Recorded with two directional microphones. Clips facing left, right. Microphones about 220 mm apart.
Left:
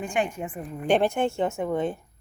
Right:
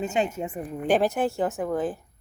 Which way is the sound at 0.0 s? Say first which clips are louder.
Right 2 dB; 20° right (ahead or behind).